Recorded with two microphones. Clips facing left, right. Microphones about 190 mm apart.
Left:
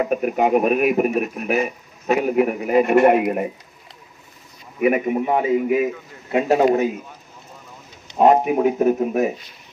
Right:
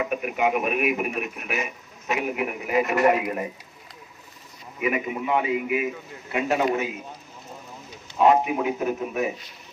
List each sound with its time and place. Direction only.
0.0 s speech: 40° left (ahead or behind)
4.8 s speech: 45° left (ahead or behind)
8.2 s speech: 45° left (ahead or behind)